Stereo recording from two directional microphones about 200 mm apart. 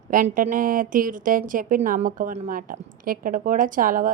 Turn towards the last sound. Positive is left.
turn(degrees=-45)  # may be behind; listen again after turning